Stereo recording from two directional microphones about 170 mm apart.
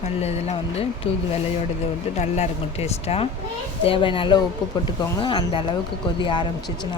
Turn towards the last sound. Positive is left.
turn(degrees=25)  # may be behind; listen again after turning